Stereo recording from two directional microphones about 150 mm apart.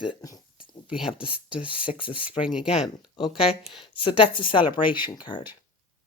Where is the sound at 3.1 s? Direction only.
35° left (ahead or behind).